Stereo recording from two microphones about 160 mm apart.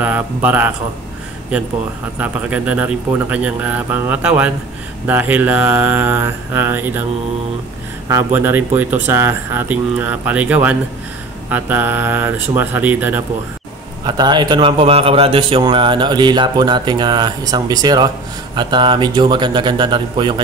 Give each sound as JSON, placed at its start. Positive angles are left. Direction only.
{"t": 0.0, "sound": "speech", "side_deg": -10}
{"t": 8.1, "sound": "speech", "side_deg": -15}
{"t": 14.0, "sound": "a man's voice", "side_deg": -30}